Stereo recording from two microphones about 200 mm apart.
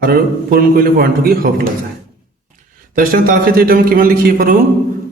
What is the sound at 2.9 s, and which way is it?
A man's voice, 45° right (ahead or behind).